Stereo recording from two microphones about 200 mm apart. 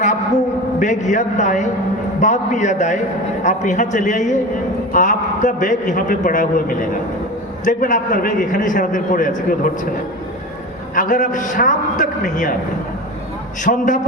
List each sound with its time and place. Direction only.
0.8 s a man's voice: 35° left (ahead or behind)
10.9 s a man's voice: 40° left (ahead or behind)
13.7 s a man's voice: 40° left (ahead or behind)